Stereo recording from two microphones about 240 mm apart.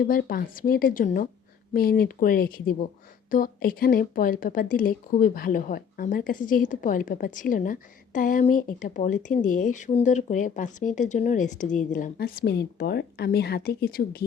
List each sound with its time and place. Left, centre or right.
0.0 s speech: left